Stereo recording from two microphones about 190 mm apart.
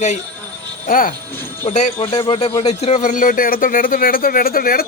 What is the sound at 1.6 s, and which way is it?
Speech, 35° left (ahead or behind).